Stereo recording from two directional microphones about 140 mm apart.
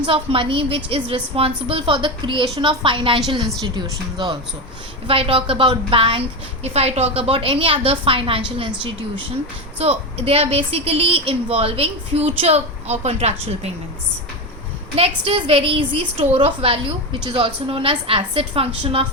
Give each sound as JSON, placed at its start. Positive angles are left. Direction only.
{"t": 0.0, "sound": "a woman's voice", "side_deg": -40}
{"t": 5.0, "sound": "a woman's voice", "side_deg": -40}
{"t": 9.7, "sound": "speech", "side_deg": -45}
{"t": 14.9, "sound": "a woman's voice", "side_deg": -40}